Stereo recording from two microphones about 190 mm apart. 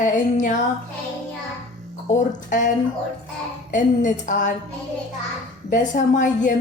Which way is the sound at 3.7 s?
40° left (ahead or behind).